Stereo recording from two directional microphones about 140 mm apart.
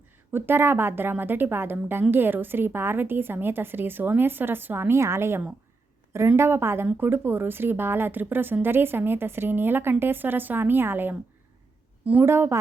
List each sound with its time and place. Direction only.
0.3 s a woman's voice: 15° right (ahead or behind)